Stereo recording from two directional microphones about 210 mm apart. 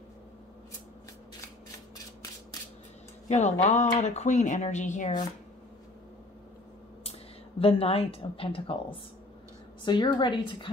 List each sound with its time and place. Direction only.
3.3 s speech: 35° left (ahead or behind)
7.0 s a woman's voice: 25° left (ahead or behind)